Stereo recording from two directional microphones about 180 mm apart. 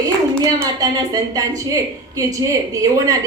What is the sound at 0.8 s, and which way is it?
A woman's voice, 20° right (ahead or behind).